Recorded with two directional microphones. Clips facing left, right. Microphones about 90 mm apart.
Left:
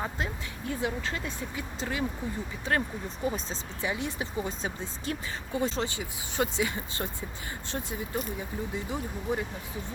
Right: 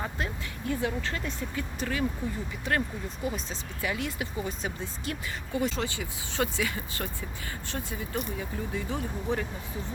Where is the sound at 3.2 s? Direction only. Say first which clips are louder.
Left 3 dB; 30° left (ahead or behind).